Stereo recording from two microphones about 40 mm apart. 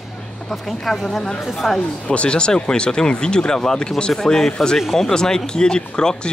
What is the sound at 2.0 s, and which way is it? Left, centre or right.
Speech, left.